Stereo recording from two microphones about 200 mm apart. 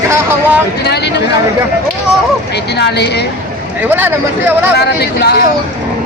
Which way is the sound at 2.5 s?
55° left (ahead or behind).